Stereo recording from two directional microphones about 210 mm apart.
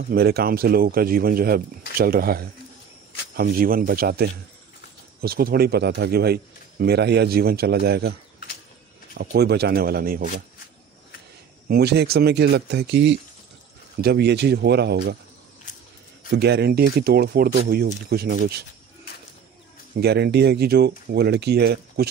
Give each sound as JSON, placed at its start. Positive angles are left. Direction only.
{"t": 0.1, "sound": "speech", "side_deg": -45}
{"t": 11.6, "sound": "speech", "side_deg": -50}
{"t": 16.3, "sound": "speech", "side_deg": -50}
{"t": 20.0, "sound": "speech", "side_deg": -50}